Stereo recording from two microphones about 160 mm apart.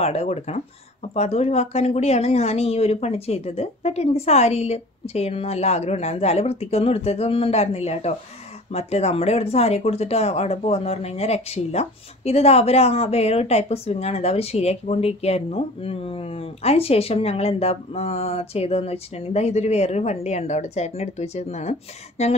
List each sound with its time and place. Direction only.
0.0 s speech: 40° left (ahead or behind)